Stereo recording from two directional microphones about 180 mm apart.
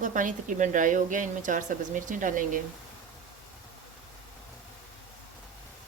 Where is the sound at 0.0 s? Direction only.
45° right (ahead or behind).